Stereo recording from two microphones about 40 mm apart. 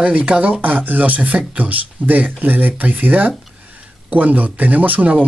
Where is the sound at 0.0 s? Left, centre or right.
Right.